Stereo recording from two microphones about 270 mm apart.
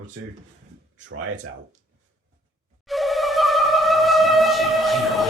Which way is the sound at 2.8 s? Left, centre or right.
Centre.